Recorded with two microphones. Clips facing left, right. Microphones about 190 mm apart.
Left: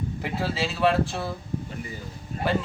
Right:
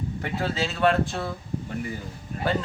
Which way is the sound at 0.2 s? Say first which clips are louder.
Right 1 dB; 5° left (ahead or behind).